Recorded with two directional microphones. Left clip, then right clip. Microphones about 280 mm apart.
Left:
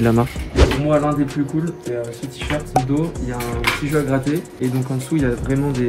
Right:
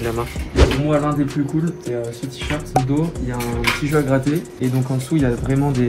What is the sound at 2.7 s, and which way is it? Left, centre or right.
Speech, centre.